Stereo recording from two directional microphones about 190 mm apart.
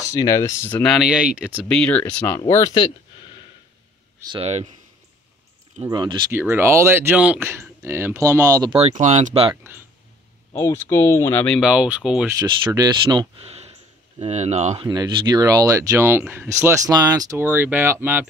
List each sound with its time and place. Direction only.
0.0 s speech: 20° left (ahead or behind)
2.5 s speech: 20° left (ahead or behind)
4.3 s speech: 35° right (ahead or behind)
5.9 s speech: 25° right (ahead or behind)
6.3 s speech: 10° right (ahead or behind)
8.7 s speech: 35° right (ahead or behind)
10.5 s speech: 15° left (ahead or behind); by 12.3 s 5° right (ahead or behind)
12.4 s speech: 20° right (ahead or behind)
14.1 s speech: 35° right (ahead or behind)
14.9 s speech: 20° right (ahead or behind)